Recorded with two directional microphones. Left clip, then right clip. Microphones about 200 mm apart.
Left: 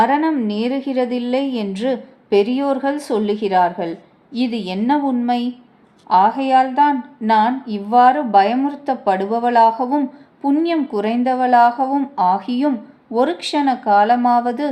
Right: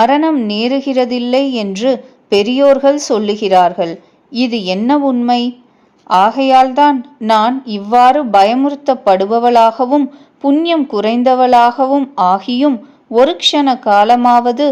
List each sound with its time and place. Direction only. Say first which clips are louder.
0.0 s a woman's voice: right 5 dB; 40° right (ahead or behind)